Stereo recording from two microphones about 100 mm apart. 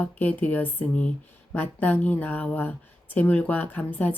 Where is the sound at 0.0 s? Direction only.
15° left (ahead or behind).